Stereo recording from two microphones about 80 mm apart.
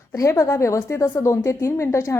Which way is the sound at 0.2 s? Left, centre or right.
Left.